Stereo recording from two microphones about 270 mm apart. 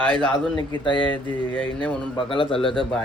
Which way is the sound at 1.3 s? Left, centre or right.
Centre.